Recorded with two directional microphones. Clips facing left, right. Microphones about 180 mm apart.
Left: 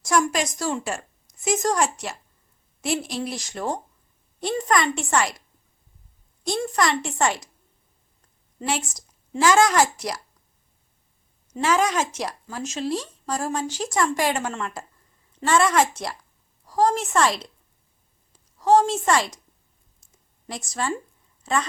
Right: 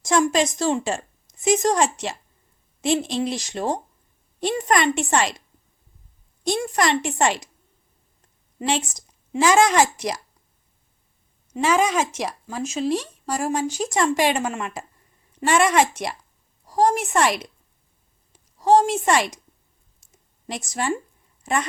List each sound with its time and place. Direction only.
0.0 s a woman's voice: 25° right (ahead or behind)
6.4 s a woman's voice: 20° right (ahead or behind)
8.5 s a woman's voice: 20° right (ahead or behind)
11.5 s speech: 10° right (ahead or behind)
18.6 s speech: 15° right (ahead or behind)
20.5 s a woman's voice: 20° right (ahead or behind)